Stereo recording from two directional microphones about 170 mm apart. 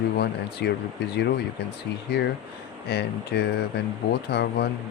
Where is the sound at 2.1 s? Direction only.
80° left.